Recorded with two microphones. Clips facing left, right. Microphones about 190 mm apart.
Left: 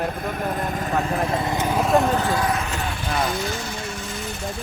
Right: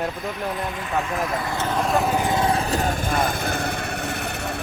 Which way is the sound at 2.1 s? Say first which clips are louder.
Right 1 dB; 20° right (ahead or behind).